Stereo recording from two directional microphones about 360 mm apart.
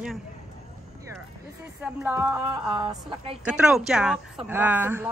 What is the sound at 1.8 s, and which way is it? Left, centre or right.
Speech, centre.